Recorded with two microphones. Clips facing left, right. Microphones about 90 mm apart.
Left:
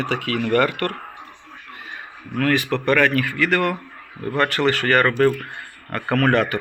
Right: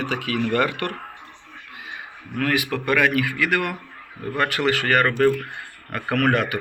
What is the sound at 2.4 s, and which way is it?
Speech, 10° right (ahead or behind).